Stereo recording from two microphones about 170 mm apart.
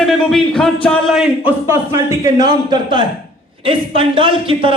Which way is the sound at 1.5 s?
15° right (ahead or behind).